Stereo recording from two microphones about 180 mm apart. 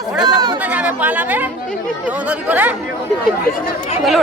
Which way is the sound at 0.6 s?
5° right (ahead or behind).